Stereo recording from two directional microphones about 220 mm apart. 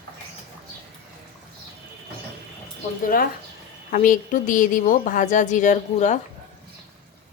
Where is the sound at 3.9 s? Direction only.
35° left (ahead or behind).